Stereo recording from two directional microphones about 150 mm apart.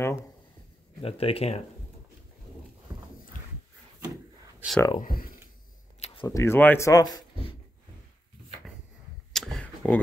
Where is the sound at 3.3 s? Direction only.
65° left (ahead or behind).